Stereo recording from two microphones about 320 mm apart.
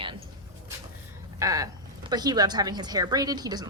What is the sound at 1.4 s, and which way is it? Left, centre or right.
Speech, centre.